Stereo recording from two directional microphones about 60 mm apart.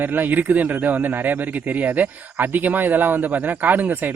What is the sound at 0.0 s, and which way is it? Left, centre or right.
Speech, right.